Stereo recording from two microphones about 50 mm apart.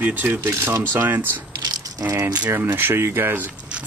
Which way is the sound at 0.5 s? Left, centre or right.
Right.